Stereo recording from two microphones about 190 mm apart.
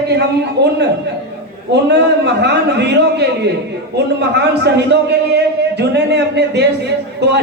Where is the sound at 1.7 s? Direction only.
65° right (ahead or behind).